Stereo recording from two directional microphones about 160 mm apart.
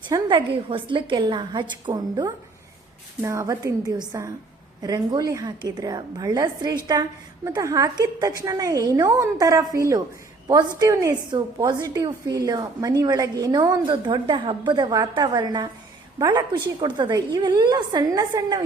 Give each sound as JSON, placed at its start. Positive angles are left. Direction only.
{"t": 0.1, "sound": "a woman's voice", "side_deg": -30}